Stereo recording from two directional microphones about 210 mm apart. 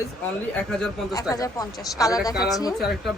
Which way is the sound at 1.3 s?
15° left (ahead or behind).